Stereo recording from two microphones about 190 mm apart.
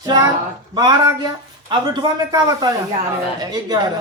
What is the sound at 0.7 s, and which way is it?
Speech, 20° right (ahead or behind).